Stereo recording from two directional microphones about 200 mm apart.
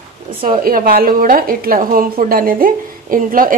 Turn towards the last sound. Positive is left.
turn(degrees=-45)  # may be behind; listen again after turning